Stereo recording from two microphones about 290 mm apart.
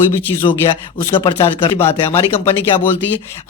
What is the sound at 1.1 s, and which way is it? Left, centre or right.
Speech, centre.